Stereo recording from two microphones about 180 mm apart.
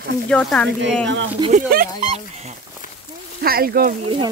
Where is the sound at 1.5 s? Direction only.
55° right (ahead or behind).